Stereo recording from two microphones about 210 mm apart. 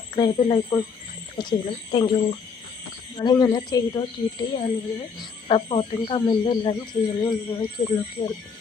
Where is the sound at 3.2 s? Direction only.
20° left (ahead or behind).